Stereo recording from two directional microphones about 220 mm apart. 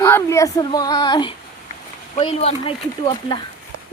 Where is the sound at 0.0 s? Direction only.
10° left (ahead or behind).